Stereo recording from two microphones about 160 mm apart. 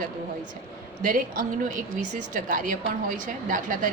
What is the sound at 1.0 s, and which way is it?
A woman's voice, 60° right (ahead or behind).